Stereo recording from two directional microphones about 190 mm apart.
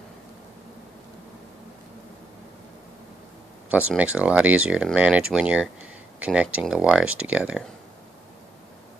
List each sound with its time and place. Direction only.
3.7 s speech: 5° right (ahead or behind)